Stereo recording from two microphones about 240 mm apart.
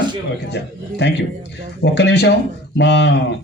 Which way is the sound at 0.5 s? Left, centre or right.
Left.